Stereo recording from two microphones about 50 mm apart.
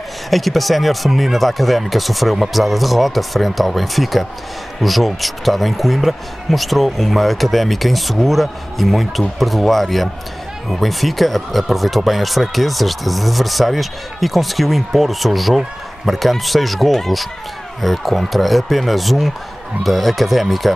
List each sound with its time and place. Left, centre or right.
0.3 s speech: centre